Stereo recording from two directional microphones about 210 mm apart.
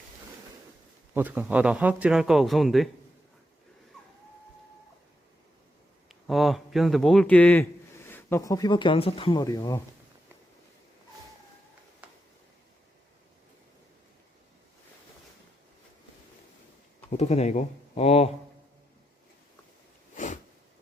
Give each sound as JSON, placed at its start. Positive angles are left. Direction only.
{"t": 1.1, "sound": "speech", "side_deg": -5}
{"t": 6.1, "sound": "speech", "side_deg": 0}
{"t": 17.1, "sound": "speech", "side_deg": 30}
{"t": 20.1, "sound": "a sound", "side_deg": 35}